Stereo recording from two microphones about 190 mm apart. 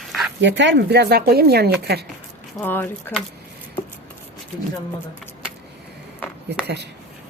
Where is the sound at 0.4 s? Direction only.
70° right (ahead or behind).